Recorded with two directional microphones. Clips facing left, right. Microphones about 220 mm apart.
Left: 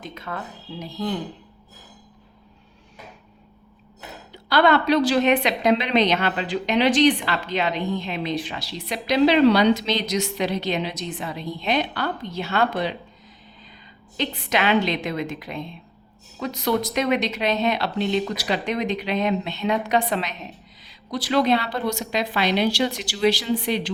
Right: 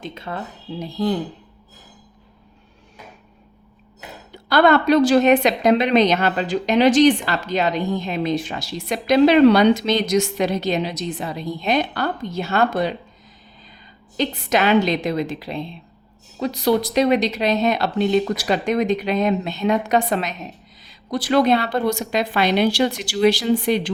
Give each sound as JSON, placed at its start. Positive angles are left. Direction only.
{"t": 0.0, "sound": "speech", "side_deg": -30}
{"t": 4.3, "sound": "a woman's voice", "side_deg": -45}
{"t": 14.2, "sound": "a woman's voice", "side_deg": -40}